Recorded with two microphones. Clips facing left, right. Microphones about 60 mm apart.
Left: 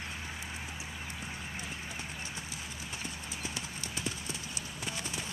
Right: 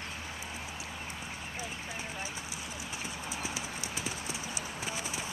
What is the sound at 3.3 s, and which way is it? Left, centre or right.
Clip-clop, centre.